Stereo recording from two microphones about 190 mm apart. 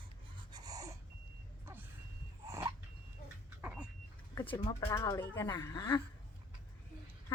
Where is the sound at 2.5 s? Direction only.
15° right (ahead or behind).